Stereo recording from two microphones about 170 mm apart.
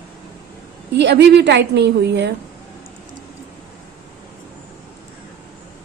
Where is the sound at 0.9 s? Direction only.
90° right.